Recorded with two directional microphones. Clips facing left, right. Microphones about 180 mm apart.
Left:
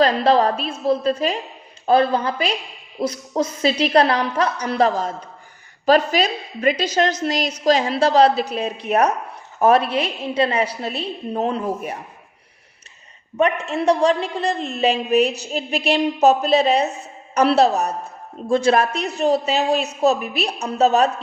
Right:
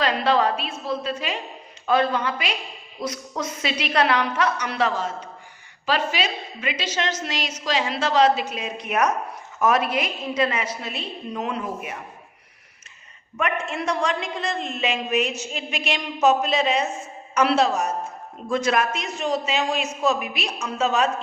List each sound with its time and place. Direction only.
0.0 s a woman's voice: 35° left (ahead or behind)
13.7 s a woman's voice: 35° left (ahead or behind)